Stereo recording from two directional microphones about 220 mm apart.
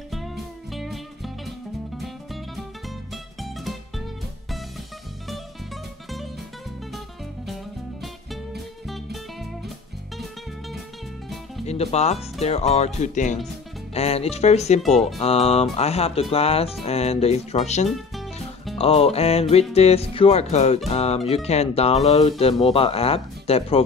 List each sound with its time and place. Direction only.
0.7 s music: centre (ahead or behind)
8.8 s music: centre (ahead or behind)
11.6 s speech: 30° left (ahead or behind)